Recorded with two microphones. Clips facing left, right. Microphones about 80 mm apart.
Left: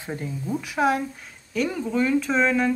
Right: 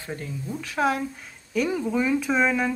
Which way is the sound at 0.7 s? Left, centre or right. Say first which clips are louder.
Left 1 dB; centre.